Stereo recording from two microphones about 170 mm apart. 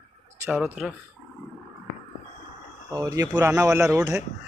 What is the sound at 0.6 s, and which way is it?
Speech, centre (ahead or behind).